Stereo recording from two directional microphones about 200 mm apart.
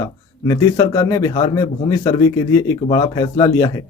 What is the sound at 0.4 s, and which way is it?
Speech, 15° left (ahead or behind).